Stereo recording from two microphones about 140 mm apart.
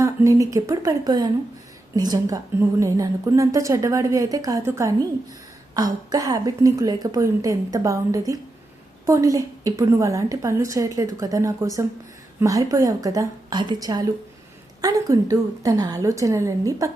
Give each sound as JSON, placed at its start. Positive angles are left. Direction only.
{"t": 0.0, "sound": "a woman's voice", "side_deg": -20}